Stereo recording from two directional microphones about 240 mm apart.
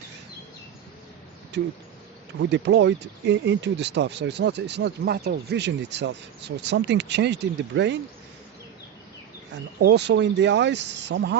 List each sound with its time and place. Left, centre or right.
1.5 s speech: right
9.8 s speech: right